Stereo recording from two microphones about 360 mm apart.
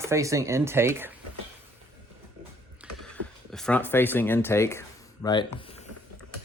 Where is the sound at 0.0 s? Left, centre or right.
Centre.